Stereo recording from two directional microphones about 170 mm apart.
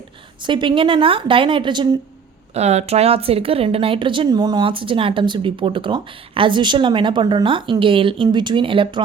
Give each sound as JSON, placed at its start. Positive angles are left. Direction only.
{"t": 0.4, "sound": "a woman's voice", "side_deg": -30}
{"t": 2.6, "sound": "speech", "side_deg": -40}